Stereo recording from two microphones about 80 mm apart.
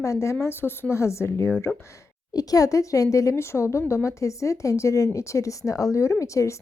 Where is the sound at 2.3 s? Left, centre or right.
Left.